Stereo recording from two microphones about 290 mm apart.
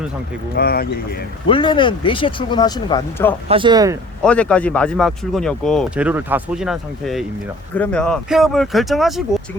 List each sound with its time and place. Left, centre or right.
0.5 s speech: left
1.5 s speech: centre
3.5 s speech: centre
4.2 s speech: centre